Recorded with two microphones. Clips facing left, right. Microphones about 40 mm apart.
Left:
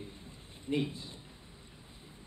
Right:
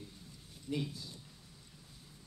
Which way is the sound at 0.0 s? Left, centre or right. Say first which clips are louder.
Left 5 dB; left.